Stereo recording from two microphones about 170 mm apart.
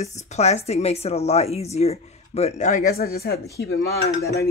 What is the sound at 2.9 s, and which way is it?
Speech, 65° left (ahead or behind).